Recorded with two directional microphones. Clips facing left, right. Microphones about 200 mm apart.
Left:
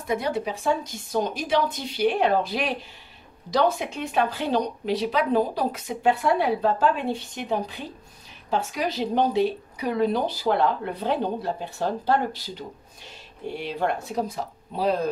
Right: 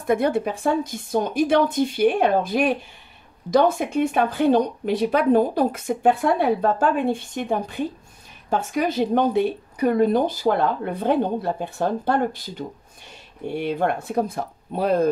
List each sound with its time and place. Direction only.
0.0 s speech: 55° right (ahead or behind)